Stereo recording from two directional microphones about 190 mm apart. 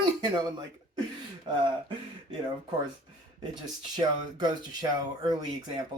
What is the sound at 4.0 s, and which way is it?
Speech, 20° right (ahead or behind).